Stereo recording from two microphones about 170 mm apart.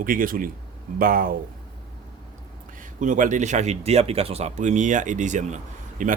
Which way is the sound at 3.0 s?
50° right (ahead or behind).